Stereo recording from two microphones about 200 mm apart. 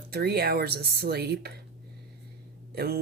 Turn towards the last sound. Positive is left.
turn(degrees=-50)  # may be behind; listen again after turning